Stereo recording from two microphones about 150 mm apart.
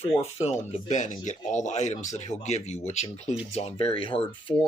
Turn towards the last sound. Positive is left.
turn(degrees=35)  # may be behind; listen again after turning